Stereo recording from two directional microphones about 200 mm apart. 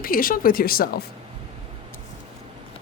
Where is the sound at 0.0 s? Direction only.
45° left (ahead or behind).